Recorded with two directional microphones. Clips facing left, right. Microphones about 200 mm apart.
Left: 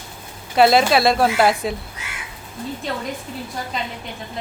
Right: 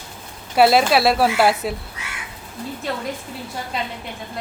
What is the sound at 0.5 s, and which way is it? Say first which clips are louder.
A woman's voice: even; 5° right (ahead or behind).